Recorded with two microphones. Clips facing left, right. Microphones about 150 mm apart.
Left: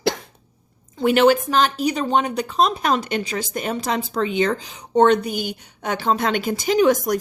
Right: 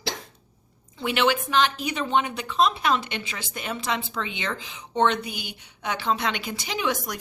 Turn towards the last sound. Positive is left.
turn(degrees=45)  # may be behind; listen again after turning